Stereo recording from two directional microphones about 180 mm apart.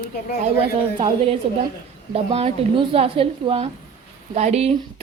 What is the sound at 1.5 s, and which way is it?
A woman's voice, 30° right (ahead or behind).